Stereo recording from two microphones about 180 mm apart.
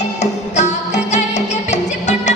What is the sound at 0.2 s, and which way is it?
Music, 40° left (ahead or behind).